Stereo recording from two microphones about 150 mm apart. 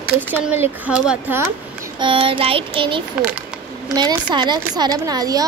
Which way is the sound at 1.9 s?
35° right (ahead or behind).